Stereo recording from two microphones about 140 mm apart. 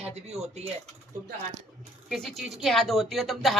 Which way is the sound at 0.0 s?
50° right (ahead or behind).